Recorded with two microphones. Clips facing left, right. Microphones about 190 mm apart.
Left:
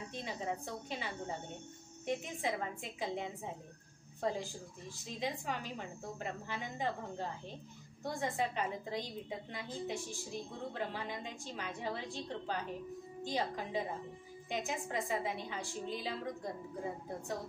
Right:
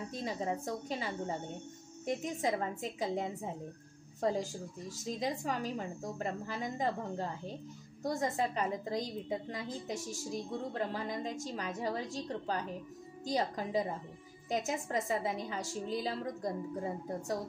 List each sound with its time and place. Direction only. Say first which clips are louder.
0.1 s a woman's voice: right 4 dB; 40° right (ahead or behind)